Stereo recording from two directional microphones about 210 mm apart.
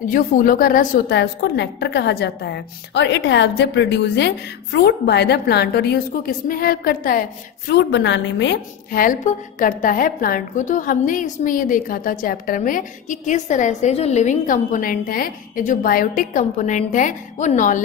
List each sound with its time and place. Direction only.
0.1 s a woman's voice: 40° left (ahead or behind)